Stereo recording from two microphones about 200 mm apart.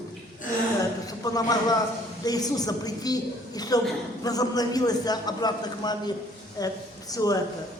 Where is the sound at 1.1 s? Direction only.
20° left (ahead or behind).